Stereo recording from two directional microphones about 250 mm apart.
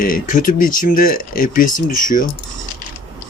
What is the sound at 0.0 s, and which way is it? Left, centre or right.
Speech, left.